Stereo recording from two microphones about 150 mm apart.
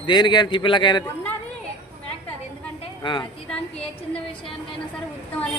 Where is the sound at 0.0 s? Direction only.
30° left (ahead or behind).